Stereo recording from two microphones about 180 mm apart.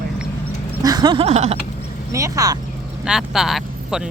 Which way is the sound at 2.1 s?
20° right (ahead or behind).